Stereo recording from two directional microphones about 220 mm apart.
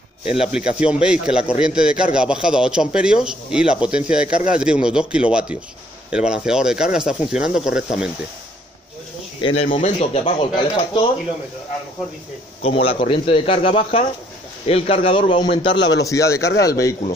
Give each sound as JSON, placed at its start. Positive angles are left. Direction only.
{"t": 0.2, "sound": "speech", "side_deg": -5}
{"t": 9.7, "sound": "speech", "side_deg": 30}
{"t": 12.6, "sound": "speech", "side_deg": 25}